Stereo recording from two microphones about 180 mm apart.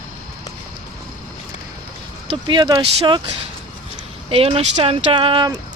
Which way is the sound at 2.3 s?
25° right (ahead or behind).